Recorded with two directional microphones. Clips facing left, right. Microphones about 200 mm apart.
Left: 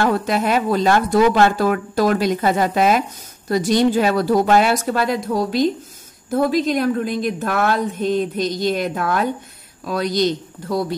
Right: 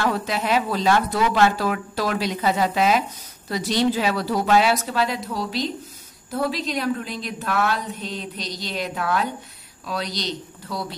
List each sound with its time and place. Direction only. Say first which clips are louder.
0.0 s a woman's voice: left 5 dB; 50° left (ahead or behind)